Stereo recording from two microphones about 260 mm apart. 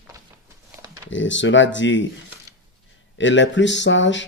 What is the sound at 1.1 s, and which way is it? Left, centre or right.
Speech, left.